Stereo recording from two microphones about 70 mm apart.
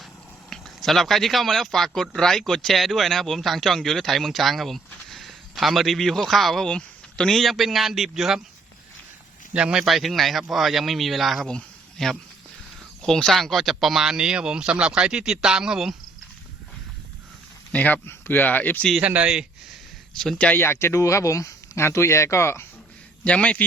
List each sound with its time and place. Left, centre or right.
0.5 s a man's voice: centre
6.7 s speech: centre
9.5 s speech: centre
9.8 s speech: centre
11.4 s a sound: centre
13.0 s speech: centre
17.7 s speech: left
19.0 s speech: centre
20.6 s speech: left
23.2 s a man's voice: centre